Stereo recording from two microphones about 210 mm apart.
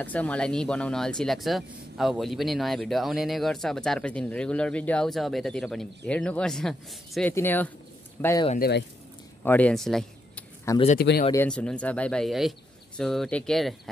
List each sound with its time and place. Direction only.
0.0 s speech: 5° left (ahead or behind)
8.5 s speech: 50° left (ahead or behind)
9.4 s speech: 5° left (ahead or behind)
11.0 s speech: 50° left (ahead or behind)
11.3 s speech: 5° left (ahead or behind)